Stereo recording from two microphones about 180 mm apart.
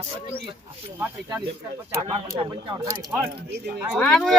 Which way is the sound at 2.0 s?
25° right (ahead or behind).